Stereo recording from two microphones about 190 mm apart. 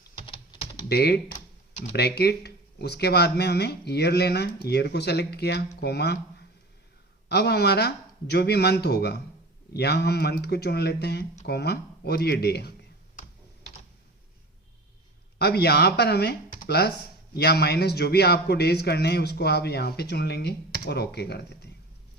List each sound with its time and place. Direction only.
0.9 s speech: 60° left (ahead or behind)
7.3 s speech: 60° left (ahead or behind)
15.4 s speech: 60° left (ahead or behind)